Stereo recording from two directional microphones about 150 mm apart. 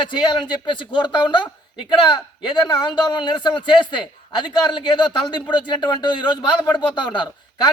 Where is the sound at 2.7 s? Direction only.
30° left (ahead or behind).